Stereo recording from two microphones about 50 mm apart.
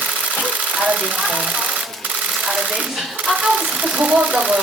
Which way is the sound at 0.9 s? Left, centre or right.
Right.